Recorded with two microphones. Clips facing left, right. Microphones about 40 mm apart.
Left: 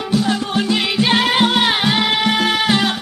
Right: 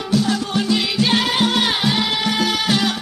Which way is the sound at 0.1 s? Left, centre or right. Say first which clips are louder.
Left 1 dB; left.